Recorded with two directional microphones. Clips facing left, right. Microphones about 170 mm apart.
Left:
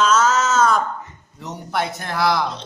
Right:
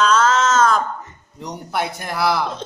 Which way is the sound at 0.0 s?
5° left (ahead or behind).